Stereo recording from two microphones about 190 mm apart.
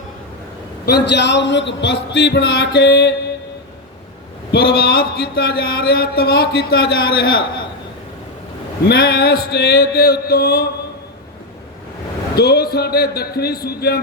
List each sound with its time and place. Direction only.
0.9 s speech: 60° left (ahead or behind)
4.5 s speech: 55° left (ahead or behind)
8.9 s speech: 55° left (ahead or behind)
12.4 s speech: 55° left (ahead or behind)